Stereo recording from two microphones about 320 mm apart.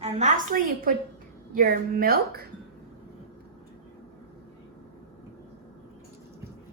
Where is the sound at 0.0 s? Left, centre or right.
Right.